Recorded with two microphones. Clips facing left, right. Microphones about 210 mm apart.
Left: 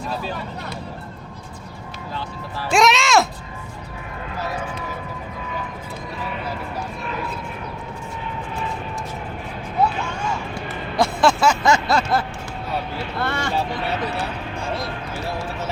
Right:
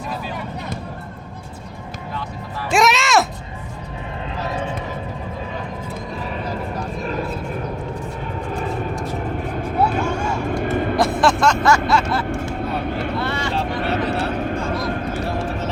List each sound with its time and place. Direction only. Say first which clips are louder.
2.7 s music: even; centre (ahead or behind)
7.0 s vehicle: right 4 dB; 40° right (ahead or behind)
10.9 s vehicle: left 2 dB; centre (ahead or behind)
11.9 s a sound: right 1 dB; 40° left (ahead or behind)
12.7 s vehicle: even; 55° right (ahead or behind)
13.1 s vehicle: right 2 dB; 50° left (ahead or behind)
13.7 s vehicle: right 4 dB; 45° right (ahead or behind)
14.8 s clip-clop: right 5 dB; 45° right (ahead or behind)